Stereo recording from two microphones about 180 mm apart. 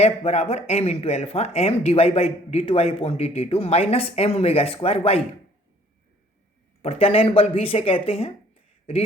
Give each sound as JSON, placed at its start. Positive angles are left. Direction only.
{"t": 0.0, "sound": "speech", "side_deg": 35}
{"t": 6.8, "sound": "speech", "side_deg": 30}